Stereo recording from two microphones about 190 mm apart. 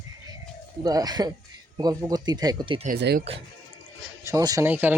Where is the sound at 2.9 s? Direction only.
60° right (ahead or behind).